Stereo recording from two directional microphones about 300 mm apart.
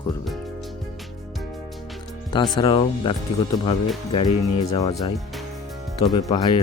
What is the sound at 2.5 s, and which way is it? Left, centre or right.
Speech, centre.